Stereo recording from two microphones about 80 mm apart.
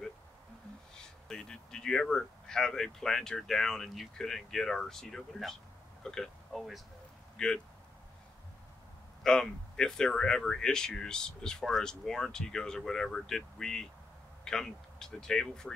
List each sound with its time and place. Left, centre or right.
1.0 s speech: centre
9.2 s speech: centre